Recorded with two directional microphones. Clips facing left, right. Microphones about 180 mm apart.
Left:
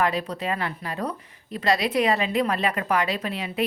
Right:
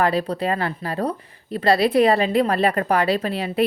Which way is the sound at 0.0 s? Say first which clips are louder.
Right 5 dB; 35° right (ahead or behind).